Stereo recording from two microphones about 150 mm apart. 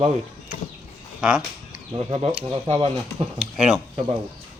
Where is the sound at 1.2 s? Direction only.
5° right (ahead or behind).